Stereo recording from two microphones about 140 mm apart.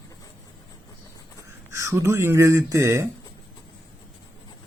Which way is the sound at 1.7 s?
20° right (ahead or behind).